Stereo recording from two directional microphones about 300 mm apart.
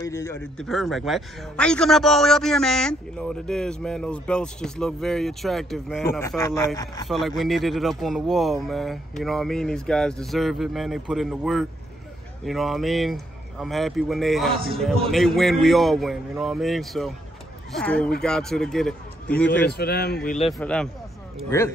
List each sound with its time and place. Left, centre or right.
0.0 s a man's voice: centre
7.1 s a man's voice: centre
19.6 s a man's voice: left
20.5 s a man's voice: centre